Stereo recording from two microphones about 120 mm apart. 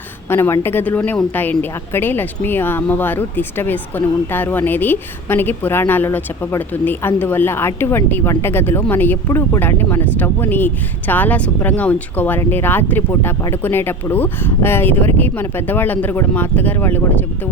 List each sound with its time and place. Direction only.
0.3 s a woman's voice: 20° left (ahead or behind)